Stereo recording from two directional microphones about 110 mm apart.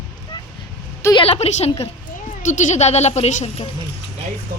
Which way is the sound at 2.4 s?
90° left.